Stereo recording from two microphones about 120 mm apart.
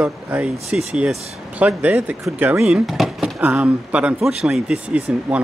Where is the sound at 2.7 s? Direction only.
Centre (ahead or behind).